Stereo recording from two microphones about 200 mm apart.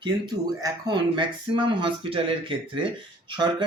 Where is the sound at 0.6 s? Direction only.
20° right (ahead or behind).